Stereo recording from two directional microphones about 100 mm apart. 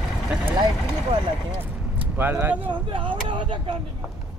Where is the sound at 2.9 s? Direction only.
55° right (ahead or behind).